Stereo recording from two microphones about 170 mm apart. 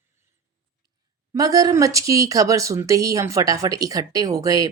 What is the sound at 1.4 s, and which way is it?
Speech, 20° right (ahead or behind).